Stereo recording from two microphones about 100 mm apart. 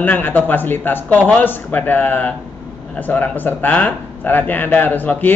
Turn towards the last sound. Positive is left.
turn(degrees=15)  # may be behind; listen again after turning